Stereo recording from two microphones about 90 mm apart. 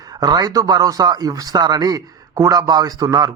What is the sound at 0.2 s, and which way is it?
Speech, 45° right (ahead or behind).